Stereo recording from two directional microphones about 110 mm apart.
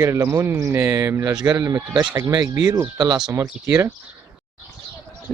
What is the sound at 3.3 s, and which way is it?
Speech, 25° right (ahead or behind).